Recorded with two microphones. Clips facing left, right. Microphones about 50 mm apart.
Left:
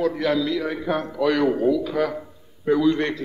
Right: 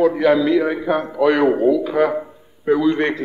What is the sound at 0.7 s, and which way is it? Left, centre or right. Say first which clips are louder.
A man's voice: right 5 dB; centre.